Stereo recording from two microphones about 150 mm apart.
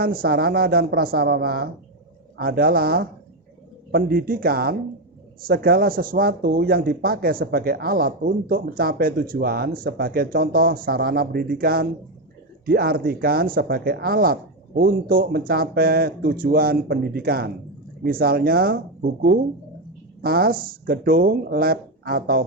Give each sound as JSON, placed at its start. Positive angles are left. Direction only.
{"t": 0.0, "sound": "speech", "side_deg": -80}
{"t": 18.0, "sound": "speech", "side_deg": -80}
{"t": 20.2, "sound": "speech", "side_deg": -85}